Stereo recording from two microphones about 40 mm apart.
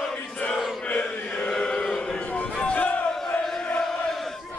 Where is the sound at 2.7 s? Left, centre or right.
Left.